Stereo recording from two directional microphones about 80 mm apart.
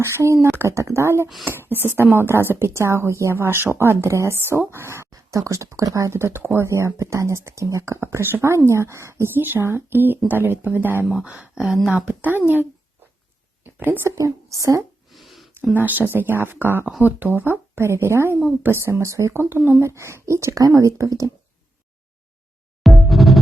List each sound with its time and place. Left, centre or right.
0.0 s speech: right
5.1 s speech: right; by 12.4 s centre
13.7 s speech: right
14.2 s speech: right
15.1 s a sound: centre
15.7 s speech: right
22.8 s music: centre